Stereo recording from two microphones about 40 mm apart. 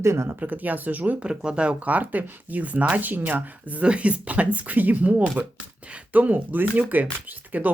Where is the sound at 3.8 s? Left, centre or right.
Right.